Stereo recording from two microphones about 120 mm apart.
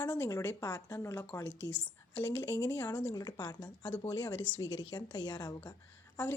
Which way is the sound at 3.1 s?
35° left (ahead or behind).